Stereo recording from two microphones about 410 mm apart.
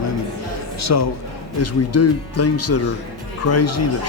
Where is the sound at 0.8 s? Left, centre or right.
Left.